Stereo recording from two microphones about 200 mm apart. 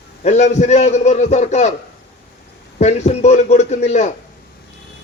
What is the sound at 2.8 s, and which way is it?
A man's voice, 35° left (ahead or behind).